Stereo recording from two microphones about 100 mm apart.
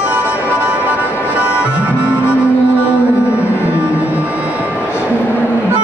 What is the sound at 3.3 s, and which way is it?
Music, 25° left (ahead or behind).